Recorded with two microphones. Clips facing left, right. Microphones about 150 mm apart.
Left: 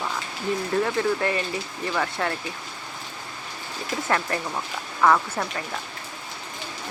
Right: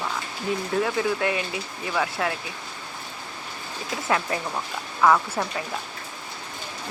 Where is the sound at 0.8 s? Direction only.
Centre (ahead or behind).